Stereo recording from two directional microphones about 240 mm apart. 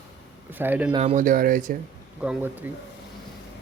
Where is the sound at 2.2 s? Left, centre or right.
Centre.